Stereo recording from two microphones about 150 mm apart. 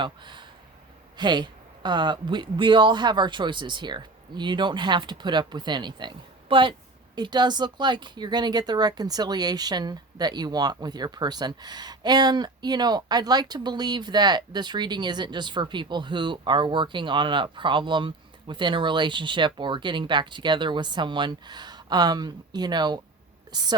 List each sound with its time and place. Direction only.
0.0 s speech: 30° right (ahead or behind)